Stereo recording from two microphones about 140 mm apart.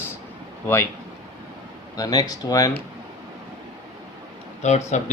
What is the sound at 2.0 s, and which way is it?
Speech, 25° left (ahead or behind).